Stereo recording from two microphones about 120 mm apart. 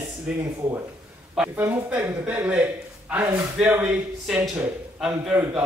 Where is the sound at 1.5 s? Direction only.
15° right (ahead or behind).